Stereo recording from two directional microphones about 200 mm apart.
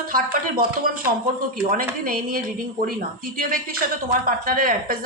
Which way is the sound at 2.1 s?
45° right (ahead or behind).